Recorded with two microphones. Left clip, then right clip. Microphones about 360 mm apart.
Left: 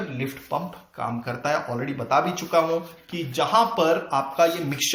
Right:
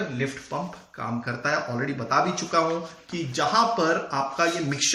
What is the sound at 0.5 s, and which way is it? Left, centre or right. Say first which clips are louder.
Speech: left 3 dB; centre.